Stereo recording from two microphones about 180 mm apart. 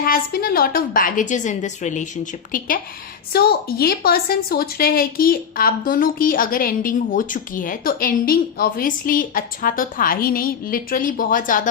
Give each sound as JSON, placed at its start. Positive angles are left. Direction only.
{"t": 0.0, "sound": "a woman's voice", "side_deg": 55}